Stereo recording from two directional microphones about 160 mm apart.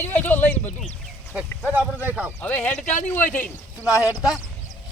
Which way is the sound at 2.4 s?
10° left (ahead or behind).